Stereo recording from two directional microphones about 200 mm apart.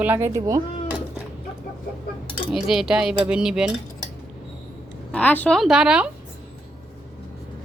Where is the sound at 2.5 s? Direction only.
Centre (ahead or behind).